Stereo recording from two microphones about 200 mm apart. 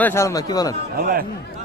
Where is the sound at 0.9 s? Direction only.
50° right (ahead or behind).